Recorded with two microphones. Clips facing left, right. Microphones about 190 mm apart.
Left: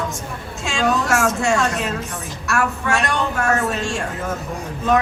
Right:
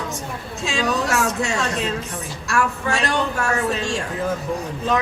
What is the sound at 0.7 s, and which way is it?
A woman's voice, 50° left (ahead or behind).